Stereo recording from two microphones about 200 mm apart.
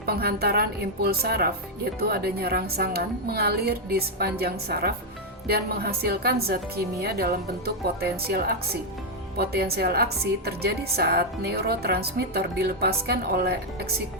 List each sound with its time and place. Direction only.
0.0 s a woman's voice: 50° right (ahead or behind)